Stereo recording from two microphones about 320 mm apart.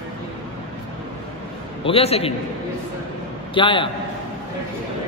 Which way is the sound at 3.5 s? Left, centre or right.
Centre.